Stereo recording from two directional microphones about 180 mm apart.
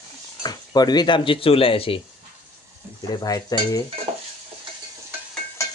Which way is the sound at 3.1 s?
20° left (ahead or behind).